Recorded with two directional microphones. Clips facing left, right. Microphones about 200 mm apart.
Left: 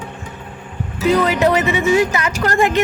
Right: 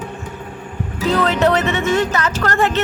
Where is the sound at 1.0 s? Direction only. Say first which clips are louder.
Left 1 dB; 10° left (ahead or behind).